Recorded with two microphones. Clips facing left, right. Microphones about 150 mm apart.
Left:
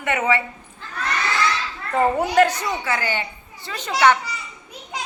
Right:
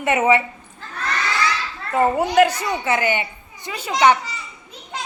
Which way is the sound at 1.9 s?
10° right (ahead or behind).